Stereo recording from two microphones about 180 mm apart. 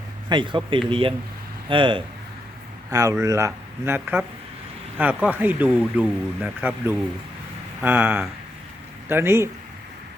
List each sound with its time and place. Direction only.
0.3 s speech: 25° right (ahead or behind)